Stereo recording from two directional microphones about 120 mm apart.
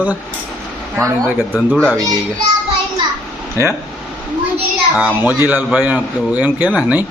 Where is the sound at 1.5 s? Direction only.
5° left (ahead or behind).